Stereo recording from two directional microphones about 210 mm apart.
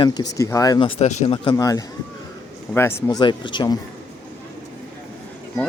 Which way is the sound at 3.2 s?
20° left (ahead or behind).